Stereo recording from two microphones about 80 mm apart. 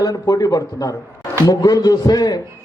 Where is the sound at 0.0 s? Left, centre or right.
Left.